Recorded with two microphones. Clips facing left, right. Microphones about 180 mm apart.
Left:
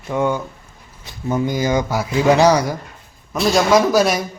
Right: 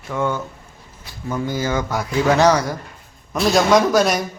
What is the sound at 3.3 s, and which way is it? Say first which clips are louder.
Speech: even; centre (ahead or behind).